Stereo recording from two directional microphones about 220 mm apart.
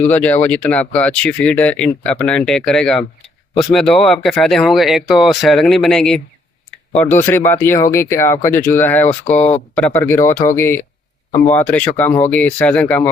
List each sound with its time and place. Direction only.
0.0 s speech: 5° left (ahead or behind)
9.3 s speech: 30° left (ahead or behind)
9.7 s speech: 5° left (ahead or behind)